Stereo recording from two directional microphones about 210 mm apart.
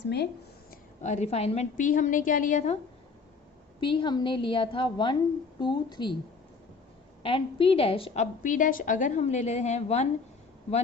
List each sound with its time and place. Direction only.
0.0 s speech: 55° left (ahead or behind)
1.0 s a woman's voice: 30° left (ahead or behind)
3.8 s a woman's voice: 20° left (ahead or behind)
7.2 s a woman's voice: 25° left (ahead or behind)